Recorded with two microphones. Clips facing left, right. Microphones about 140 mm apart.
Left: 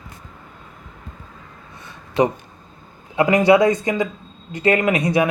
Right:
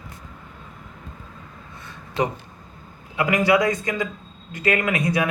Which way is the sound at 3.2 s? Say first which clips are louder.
Left 5 dB; 30° left (ahead or behind).